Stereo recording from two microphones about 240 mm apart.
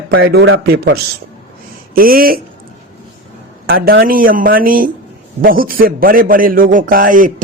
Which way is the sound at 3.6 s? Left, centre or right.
Right.